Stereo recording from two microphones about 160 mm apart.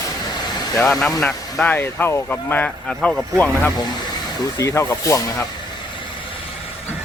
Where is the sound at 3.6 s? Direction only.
20° left (ahead or behind).